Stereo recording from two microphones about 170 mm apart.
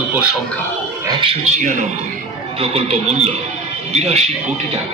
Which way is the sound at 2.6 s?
35° right (ahead or behind).